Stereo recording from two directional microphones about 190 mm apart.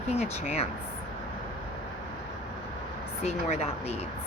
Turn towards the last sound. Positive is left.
turn(degrees=35)  # may be behind; listen again after turning